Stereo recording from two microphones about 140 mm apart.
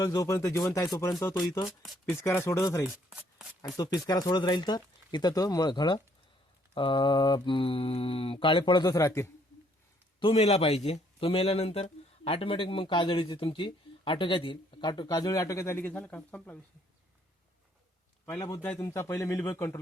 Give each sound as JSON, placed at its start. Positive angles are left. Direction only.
{"t": 0.0, "sound": "speech", "side_deg": 25}
{"t": 2.4, "sound": "speech", "side_deg": 20}
{"t": 3.1, "sound": "a sound", "side_deg": -5}
{"t": 3.8, "sound": "a man's voice", "side_deg": 25}
{"t": 10.2, "sound": "a man's voice", "side_deg": 45}
{"t": 18.3, "sound": "speech", "side_deg": 20}